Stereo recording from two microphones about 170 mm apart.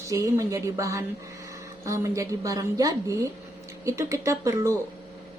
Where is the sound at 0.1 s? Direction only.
20° right (ahead or behind).